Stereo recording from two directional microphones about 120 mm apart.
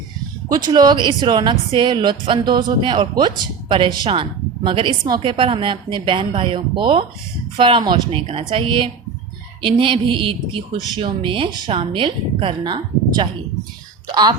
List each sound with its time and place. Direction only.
0.4 s speech: 35° right (ahead or behind)